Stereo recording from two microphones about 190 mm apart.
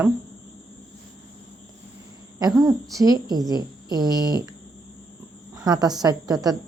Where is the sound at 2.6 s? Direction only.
20° right (ahead or behind).